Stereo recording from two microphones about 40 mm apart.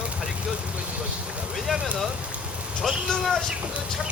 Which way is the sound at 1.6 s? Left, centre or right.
Centre.